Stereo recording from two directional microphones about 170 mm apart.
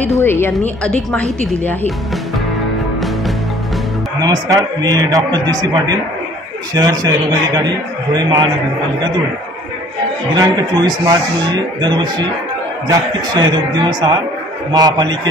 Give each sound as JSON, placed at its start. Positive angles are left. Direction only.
{"t": 0.2, "sound": "a woman's voice", "side_deg": 15}
{"t": 4.2, "sound": "a man's voice", "side_deg": -20}
{"t": 10.3, "sound": "a man's voice", "side_deg": -25}